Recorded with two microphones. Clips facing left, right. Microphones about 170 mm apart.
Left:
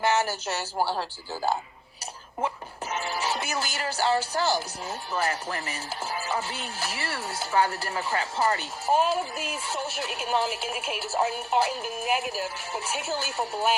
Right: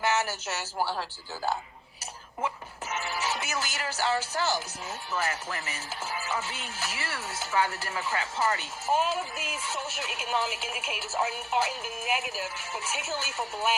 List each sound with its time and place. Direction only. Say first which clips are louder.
0.0 s speech: left 3 dB; 30° left (ahead or behind)
2.9 s speech: left 3 dB; 35° left (ahead or behind)